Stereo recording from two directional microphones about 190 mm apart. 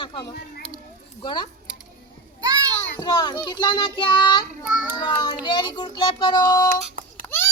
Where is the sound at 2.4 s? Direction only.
20° right (ahead or behind).